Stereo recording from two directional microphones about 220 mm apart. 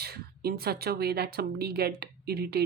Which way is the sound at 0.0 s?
45° right (ahead or behind).